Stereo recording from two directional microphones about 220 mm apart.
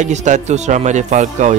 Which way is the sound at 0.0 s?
35° right (ahead or behind).